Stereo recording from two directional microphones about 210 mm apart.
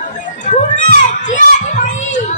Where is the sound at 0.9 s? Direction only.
35° left (ahead or behind).